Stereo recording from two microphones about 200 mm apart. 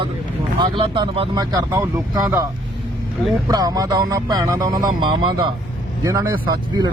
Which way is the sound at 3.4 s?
20° right (ahead or behind).